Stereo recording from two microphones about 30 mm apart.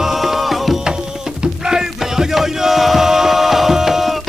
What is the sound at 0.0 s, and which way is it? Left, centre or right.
Music, centre.